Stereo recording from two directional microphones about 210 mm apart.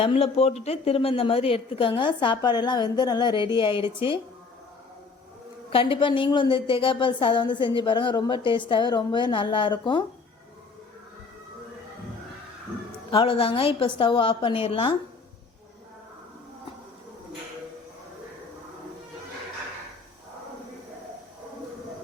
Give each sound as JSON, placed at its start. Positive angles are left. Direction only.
{"t": 0.0, "sound": "a woman's voice", "side_deg": 25}
{"t": 5.7, "sound": "a woman's voice", "side_deg": 25}
{"t": 13.1, "sound": "a woman's voice", "side_deg": 25}